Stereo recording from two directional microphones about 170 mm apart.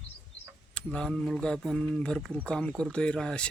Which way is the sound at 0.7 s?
5° left (ahead or behind).